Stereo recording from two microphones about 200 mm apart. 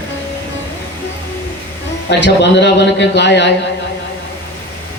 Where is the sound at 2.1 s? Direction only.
60° left (ahead or behind).